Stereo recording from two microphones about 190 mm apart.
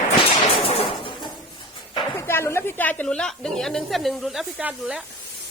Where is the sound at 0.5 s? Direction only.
30° left (ahead or behind).